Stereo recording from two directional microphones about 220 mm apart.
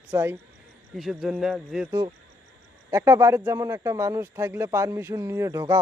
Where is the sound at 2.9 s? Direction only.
15° right (ahead or behind).